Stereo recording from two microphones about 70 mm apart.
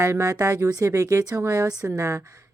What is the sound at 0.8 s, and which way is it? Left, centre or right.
Speech, right.